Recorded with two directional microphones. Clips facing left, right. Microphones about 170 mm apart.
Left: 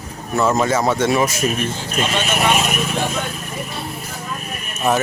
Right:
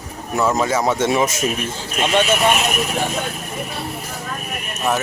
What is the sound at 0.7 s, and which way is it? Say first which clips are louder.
Speech: left 1 dB; 15° right (ahead or behind).